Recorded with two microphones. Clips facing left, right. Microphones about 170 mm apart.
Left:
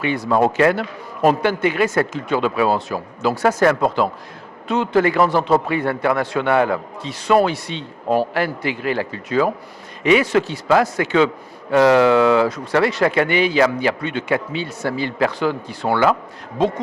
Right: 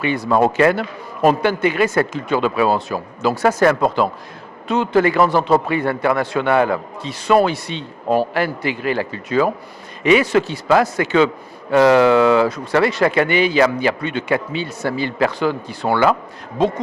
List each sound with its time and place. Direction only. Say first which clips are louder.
0.0 s speech: right 1 dB; 15° right (ahead or behind)